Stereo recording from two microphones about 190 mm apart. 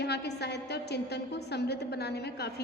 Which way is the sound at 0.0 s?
60° left (ahead or behind).